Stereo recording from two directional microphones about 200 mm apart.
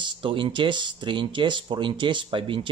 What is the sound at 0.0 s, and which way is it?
Speech, 25° right (ahead or behind).